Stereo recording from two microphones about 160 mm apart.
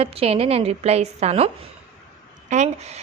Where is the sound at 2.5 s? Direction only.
50° right (ahead or behind).